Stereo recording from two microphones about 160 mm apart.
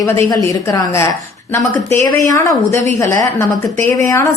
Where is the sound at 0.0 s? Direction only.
20° left (ahead or behind).